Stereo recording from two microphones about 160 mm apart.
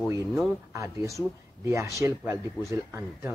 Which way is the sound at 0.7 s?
20° right (ahead or behind).